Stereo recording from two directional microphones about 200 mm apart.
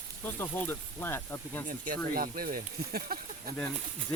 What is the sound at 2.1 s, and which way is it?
Speech, 45° right (ahead or behind).